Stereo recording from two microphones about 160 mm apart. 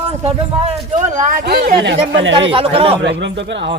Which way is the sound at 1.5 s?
80° right.